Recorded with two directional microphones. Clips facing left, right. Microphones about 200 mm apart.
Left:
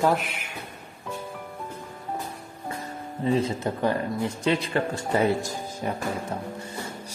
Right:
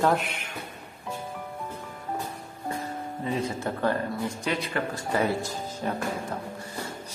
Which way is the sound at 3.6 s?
15° left (ahead or behind).